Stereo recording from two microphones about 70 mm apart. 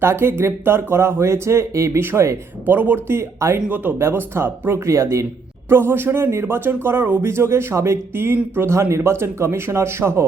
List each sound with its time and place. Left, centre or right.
0.0 s speech: right
2.6 s speech: right
3.7 s speech: right
4.0 s a man's voice: right
5.6 s speech: right